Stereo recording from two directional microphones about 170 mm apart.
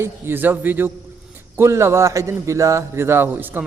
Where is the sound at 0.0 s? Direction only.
10° right (ahead or behind).